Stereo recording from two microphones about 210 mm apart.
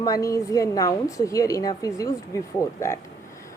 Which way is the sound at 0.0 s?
15° left (ahead or behind).